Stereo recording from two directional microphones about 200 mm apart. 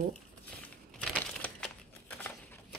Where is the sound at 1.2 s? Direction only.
5° left (ahead or behind).